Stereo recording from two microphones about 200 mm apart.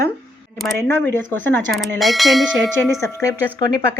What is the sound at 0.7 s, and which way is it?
Speech, 10° left (ahead or behind).